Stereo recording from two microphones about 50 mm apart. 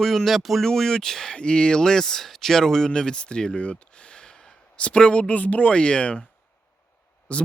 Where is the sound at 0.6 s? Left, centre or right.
Centre.